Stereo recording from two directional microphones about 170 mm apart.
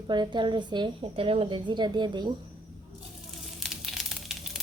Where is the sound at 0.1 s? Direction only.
25° right (ahead or behind).